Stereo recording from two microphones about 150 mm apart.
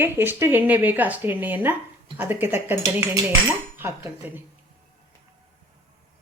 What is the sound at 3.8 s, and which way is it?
Speech, 15° right (ahead or behind).